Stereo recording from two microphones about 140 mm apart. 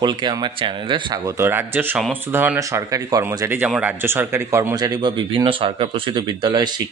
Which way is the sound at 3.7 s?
10° right (ahead or behind).